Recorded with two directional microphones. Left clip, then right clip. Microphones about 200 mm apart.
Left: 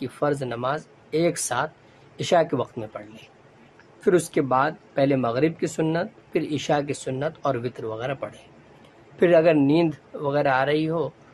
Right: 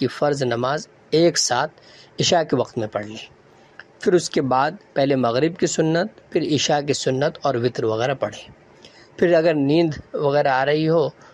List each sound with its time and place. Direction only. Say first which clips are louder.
0.0 s speech: right 5 dB; 25° right (ahead or behind)